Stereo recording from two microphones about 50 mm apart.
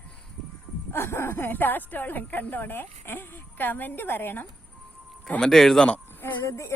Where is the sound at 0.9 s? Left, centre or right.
Left.